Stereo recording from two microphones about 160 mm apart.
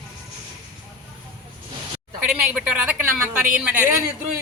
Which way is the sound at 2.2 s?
10° right (ahead or behind).